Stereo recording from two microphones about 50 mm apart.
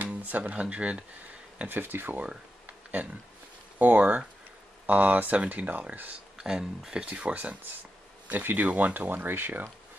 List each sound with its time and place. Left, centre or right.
0.0 s speech: right
1.7 s speech: right
3.7 s speech: right
6.3 s a sound: centre
6.9 s speech: centre
8.3 s speech: right